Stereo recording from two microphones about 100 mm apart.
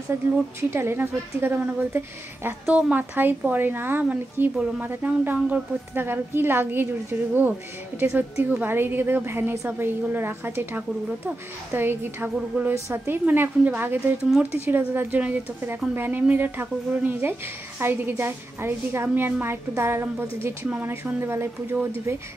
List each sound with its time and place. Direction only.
0.1 s speech: 25° right (ahead or behind)